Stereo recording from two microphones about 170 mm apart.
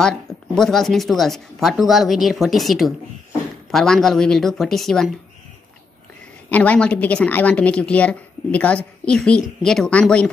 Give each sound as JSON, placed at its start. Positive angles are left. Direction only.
{"t": 0.0, "sound": "speech", "side_deg": 5}
{"t": 6.5, "sound": "a woman's voice", "side_deg": 10}